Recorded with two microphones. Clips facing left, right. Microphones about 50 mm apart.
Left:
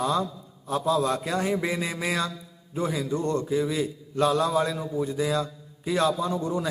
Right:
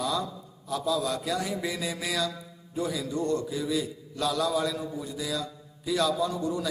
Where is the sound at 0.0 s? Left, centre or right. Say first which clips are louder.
Left 4 dB; left.